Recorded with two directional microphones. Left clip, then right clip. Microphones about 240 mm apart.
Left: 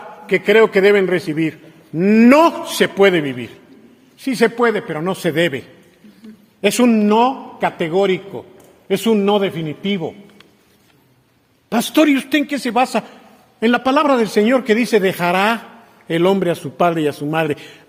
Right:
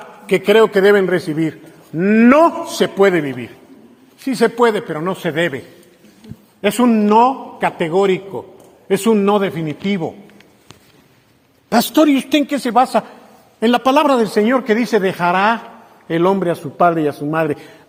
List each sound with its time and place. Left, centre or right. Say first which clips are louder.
0.3 s a man's voice: right 1 dB; centre
2.0 s a man's voice: even; left; by 4.6 s centre
4.9 s a man's voice: even; left; by 10.1 s centre
11.7 s a man's voice: right 2 dB; centre
13.6 s a man's voice: right 2 dB; centre
14.3 s a man's voice: even; centre